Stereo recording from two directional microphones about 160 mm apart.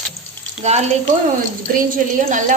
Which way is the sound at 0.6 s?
45° right (ahead or behind).